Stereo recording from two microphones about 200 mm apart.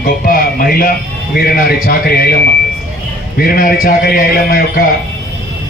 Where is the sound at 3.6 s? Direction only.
45° left (ahead or behind).